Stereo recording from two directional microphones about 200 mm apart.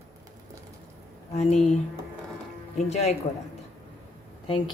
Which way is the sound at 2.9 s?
35° left (ahead or behind).